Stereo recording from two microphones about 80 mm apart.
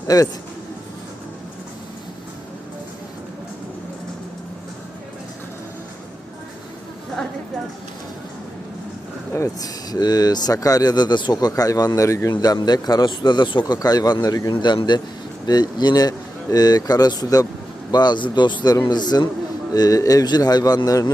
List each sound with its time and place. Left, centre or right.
0.1 s speech: left
9.6 s speech: left
12.5 s speech: left
13.7 s speech: left
14.5 s speech: left
17.9 s speech: left
18.6 s speech: left
19.7 s speech: left